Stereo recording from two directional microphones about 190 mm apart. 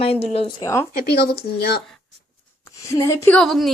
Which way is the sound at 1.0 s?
55° left (ahead or behind).